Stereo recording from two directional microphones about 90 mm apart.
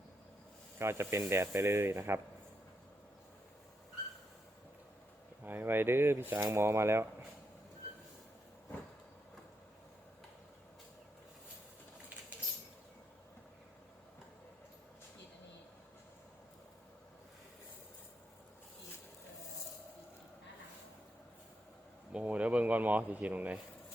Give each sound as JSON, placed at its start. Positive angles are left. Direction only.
{"t": 0.8, "sound": "speech", "side_deg": -30}
{"t": 5.5, "sound": "speech", "side_deg": -25}
{"t": 22.1, "sound": "a sound", "side_deg": -15}